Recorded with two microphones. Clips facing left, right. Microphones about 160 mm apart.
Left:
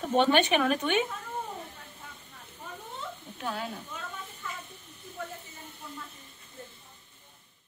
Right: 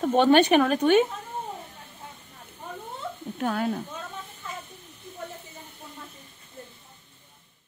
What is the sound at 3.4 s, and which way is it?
Speech, 55° right (ahead or behind).